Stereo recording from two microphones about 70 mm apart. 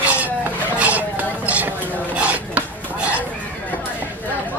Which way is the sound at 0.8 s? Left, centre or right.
Right.